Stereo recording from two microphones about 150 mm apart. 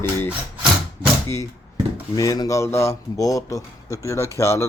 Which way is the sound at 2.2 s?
25° left (ahead or behind).